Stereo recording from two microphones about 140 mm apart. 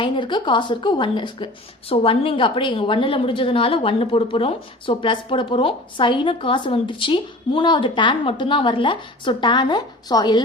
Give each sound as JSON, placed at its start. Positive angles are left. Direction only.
{"t": 0.0, "sound": "a woman's voice", "side_deg": 35}